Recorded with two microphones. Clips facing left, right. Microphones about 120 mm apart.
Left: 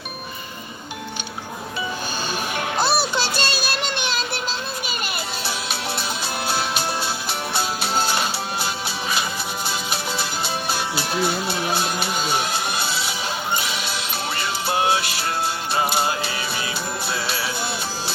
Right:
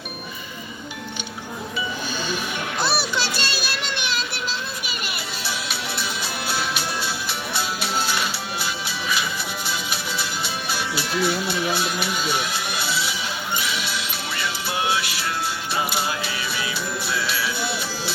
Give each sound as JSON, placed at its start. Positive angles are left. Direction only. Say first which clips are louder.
{"t": 2.3, "sound": "music", "louder": "left 3 dB", "side_deg": 40}
{"t": 6.5, "sound": "music", "louder": "left 2 dB", "side_deg": 35}